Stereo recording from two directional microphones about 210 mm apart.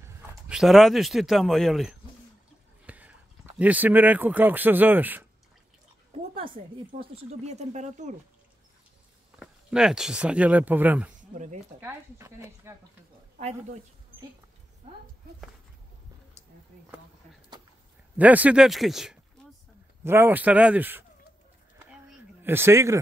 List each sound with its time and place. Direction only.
0.3 s speech: 5° right (ahead or behind)
6.3 s speech: 25° right (ahead or behind)
9.4 s speech: centre (ahead or behind)
11.1 s a sound: 35° right (ahead or behind)
11.8 s speech: 15° right (ahead or behind)
18.1 s speech: 5° right (ahead or behind)
22.1 s a sound: 10° right (ahead or behind)